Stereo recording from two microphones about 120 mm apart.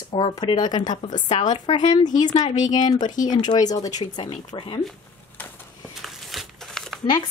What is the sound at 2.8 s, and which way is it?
Speech, 35° left (ahead or behind).